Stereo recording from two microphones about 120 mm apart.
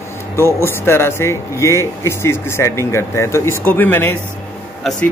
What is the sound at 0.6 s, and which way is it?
Speech, 20° left (ahead or behind).